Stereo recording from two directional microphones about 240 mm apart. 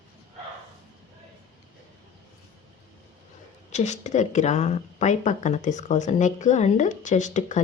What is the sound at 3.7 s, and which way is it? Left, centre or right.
A woman's voice, left.